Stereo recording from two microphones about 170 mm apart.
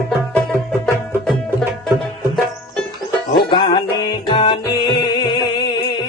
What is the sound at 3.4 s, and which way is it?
Music, 25° left (ahead or behind).